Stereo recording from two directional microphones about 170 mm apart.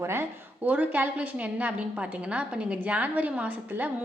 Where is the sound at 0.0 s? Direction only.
15° right (ahead or behind).